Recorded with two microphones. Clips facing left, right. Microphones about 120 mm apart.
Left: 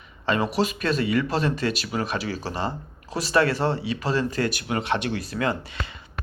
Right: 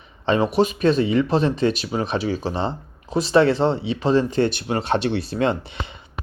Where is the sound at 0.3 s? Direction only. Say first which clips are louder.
Right 5 dB; 20° right (ahead or behind).